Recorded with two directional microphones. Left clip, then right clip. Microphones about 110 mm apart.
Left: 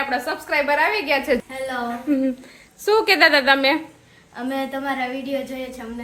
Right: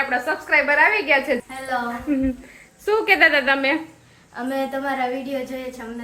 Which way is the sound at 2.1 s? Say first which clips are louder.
Left 1 dB; 40° left (ahead or behind).